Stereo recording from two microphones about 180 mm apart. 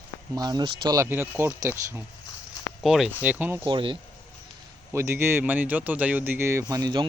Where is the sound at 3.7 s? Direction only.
25° right (ahead or behind).